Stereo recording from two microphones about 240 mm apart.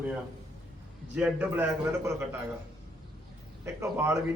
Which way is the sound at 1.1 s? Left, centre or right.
Centre.